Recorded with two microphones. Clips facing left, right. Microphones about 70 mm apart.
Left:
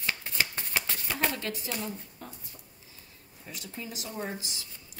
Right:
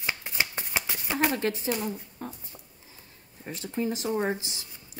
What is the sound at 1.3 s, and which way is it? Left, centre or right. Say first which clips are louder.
Speech: right 7 dB; right.